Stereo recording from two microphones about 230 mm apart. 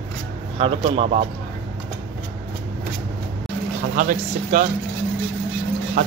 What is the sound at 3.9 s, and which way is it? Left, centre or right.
Speech, right.